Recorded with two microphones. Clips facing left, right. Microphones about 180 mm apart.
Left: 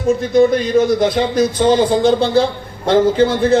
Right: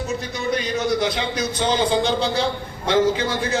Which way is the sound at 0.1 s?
50° left (ahead or behind).